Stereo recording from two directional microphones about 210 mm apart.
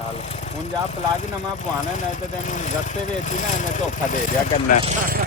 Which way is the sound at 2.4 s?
35° left (ahead or behind).